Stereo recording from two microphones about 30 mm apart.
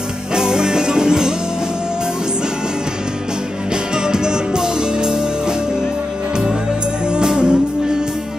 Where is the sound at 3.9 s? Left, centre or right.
Right.